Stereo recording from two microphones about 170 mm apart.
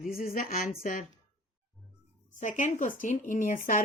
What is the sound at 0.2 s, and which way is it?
Speech, 55° left (ahead or behind).